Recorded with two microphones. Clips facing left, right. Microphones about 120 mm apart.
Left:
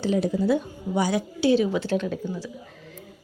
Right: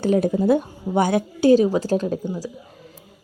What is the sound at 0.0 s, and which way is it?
A woman's voice, 50° right (ahead or behind).